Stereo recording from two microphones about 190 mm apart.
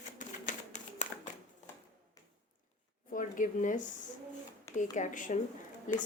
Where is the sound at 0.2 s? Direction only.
40° left (ahead or behind).